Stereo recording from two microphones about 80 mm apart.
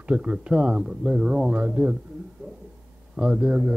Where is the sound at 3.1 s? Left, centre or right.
Centre.